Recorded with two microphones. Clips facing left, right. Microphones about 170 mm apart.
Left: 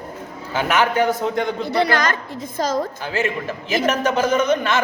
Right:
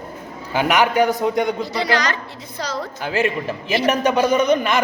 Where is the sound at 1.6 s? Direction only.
60° left (ahead or behind).